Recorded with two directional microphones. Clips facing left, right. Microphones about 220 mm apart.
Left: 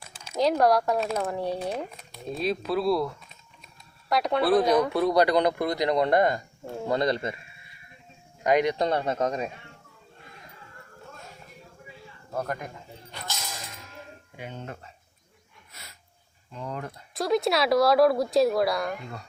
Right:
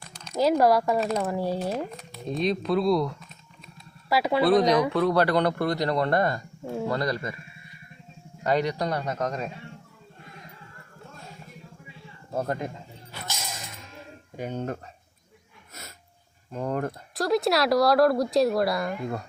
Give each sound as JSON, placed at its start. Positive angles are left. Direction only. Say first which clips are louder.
{"t": 0.0, "sound": "speech", "louder": "right 1 dB", "side_deg": 5}
{"t": 8.4, "sound": "speech", "louder": "left 2 dB", "side_deg": 20}
{"t": 12.3, "sound": "speech", "louder": "right 3 dB", "side_deg": -25}
{"t": 13.1, "sound": "music", "louder": "right 1 dB", "side_deg": -5}
{"t": 14.3, "sound": "speech", "louder": "right 8 dB", "side_deg": -40}
{"t": 16.5, "sound": "speech", "louder": "right 7 dB", "side_deg": -50}
{"t": 17.2, "sound": "speech", "louder": "right 1 dB", "side_deg": 0}